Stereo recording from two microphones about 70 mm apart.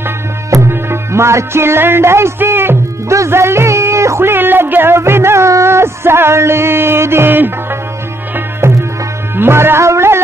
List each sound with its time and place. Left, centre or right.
0.5 s music: right
8.5 s music: right